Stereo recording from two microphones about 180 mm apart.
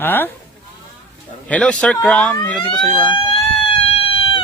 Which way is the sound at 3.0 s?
25° left (ahead or behind).